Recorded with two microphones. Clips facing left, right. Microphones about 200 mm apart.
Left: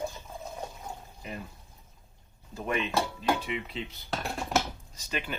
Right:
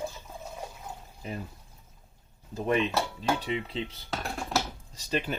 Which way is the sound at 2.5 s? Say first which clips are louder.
Right 3 dB; 35° right (ahead or behind).